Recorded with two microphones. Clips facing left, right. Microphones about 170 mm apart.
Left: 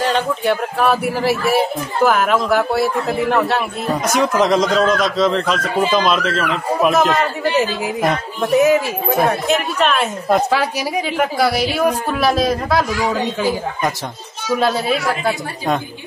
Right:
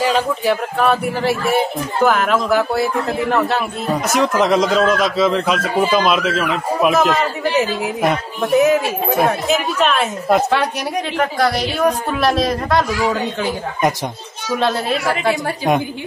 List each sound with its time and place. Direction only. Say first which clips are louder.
0.0 s speech: right 1 dB; 5° right (ahead or behind)
14.6 s speech: even; 5° left (ahead or behind)